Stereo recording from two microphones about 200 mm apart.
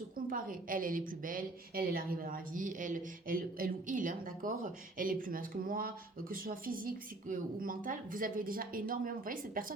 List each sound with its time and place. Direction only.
0.3 s a woman's voice: 45° right (ahead or behind)